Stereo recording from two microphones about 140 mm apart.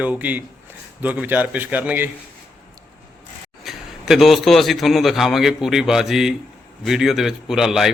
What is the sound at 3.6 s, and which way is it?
A man's voice, centre (ahead or behind).